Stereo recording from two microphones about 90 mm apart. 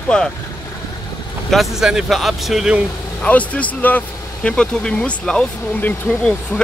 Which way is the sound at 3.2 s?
15° left (ahead or behind).